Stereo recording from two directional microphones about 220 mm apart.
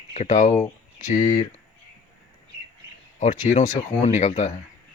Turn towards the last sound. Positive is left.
turn(degrees=30)  # may be behind; listen again after turning